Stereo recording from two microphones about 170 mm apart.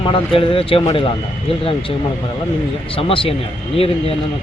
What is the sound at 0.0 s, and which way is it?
Speech, 30° left (ahead or behind).